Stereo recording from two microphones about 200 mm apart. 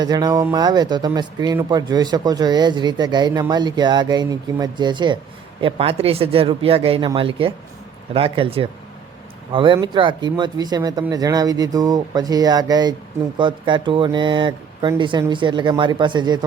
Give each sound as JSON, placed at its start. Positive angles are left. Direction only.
{"t": 0.0, "sound": "speech", "side_deg": -20}